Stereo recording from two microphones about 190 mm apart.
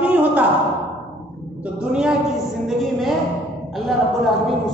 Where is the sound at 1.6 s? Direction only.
5° right (ahead or behind).